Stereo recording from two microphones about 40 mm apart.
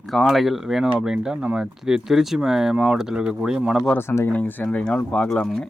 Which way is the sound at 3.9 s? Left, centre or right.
Left.